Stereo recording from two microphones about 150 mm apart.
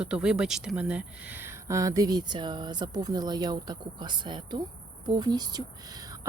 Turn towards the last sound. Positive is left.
turn(degrees=-25)  # may be behind; listen again after turning